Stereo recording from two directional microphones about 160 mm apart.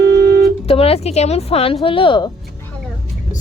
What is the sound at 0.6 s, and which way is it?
Speech, 35° left (ahead or behind).